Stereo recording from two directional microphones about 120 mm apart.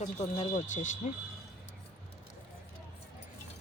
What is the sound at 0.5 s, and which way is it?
Speech, 90° left.